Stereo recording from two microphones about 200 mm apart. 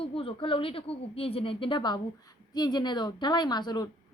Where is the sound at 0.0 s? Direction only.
25° left (ahead or behind).